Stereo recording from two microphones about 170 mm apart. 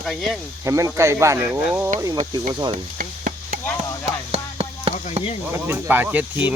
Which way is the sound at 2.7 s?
55° right (ahead or behind).